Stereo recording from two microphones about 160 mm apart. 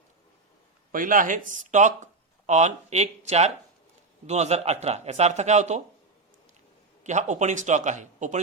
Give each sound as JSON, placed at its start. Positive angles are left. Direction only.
{"t": 0.9, "sound": "a man's voice", "side_deg": -55}
{"t": 7.0, "sound": "a man's voice", "side_deg": -50}